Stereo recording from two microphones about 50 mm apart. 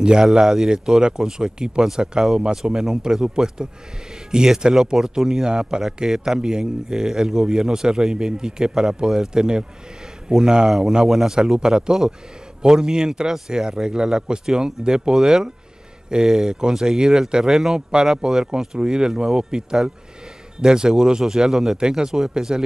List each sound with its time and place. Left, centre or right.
0.0 s a man's voice: centre